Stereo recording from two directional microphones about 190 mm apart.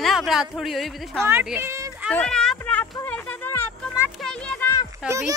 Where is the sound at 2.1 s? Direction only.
5° left (ahead or behind).